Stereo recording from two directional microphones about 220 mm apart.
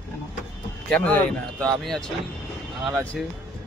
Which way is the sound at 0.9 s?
5° left (ahead or behind).